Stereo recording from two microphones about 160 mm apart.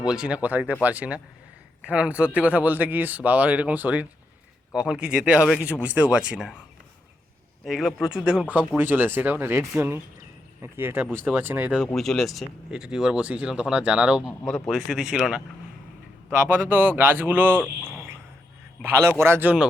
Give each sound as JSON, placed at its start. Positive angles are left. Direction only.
{"t": 0.0, "sound": "speech", "side_deg": -5}
{"t": 7.6, "sound": "speech", "side_deg": 0}
{"t": 11.9, "sound": "speech", "side_deg": 5}
{"t": 14.3, "sound": "speech", "side_deg": 5}
{"t": 16.6, "sound": "speech", "side_deg": -15}
{"t": 17.6, "sound": "cricket", "side_deg": -15}
{"t": 18.8, "sound": "speech", "side_deg": -15}